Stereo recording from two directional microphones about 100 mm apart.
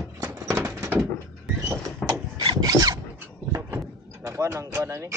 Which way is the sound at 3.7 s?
25° right (ahead or behind).